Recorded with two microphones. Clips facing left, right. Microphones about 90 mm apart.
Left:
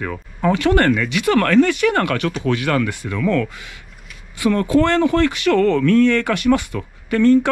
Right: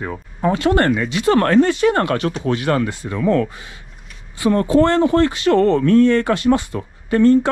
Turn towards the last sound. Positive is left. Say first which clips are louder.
# right 1 dB
turn(degrees=-20)  # may be behind; listen again after turning